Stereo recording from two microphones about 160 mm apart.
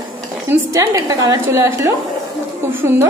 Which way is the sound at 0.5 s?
20° right (ahead or behind).